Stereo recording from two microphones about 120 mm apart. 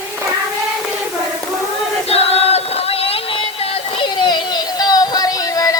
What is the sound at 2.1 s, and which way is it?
Music, 55° left (ahead or behind).